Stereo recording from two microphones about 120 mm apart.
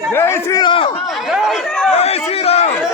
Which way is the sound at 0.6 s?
45° left (ahead or behind).